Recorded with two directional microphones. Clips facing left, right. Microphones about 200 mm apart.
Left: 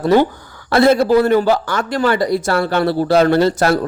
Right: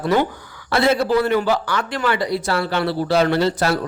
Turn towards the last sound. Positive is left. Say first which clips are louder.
# left 5 dB
turn(degrees=45)  # may be behind; listen again after turning